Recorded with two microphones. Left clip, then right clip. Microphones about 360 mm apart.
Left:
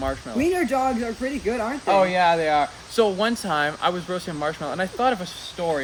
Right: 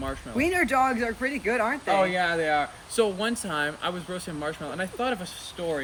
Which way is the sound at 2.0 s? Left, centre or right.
Centre.